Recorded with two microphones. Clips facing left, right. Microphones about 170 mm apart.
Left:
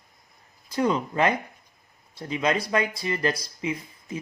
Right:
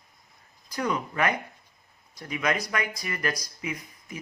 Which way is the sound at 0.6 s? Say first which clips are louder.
Left 5 dB; 25° left (ahead or behind).